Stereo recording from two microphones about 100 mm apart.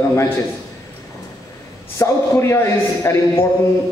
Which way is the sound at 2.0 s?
30° left (ahead or behind).